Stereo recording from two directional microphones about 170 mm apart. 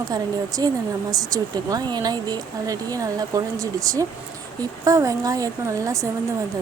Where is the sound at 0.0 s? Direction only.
20° right (ahead or behind).